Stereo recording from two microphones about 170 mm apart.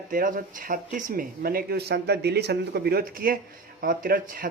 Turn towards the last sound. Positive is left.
turn(degrees=-55)  # may be behind; listen again after turning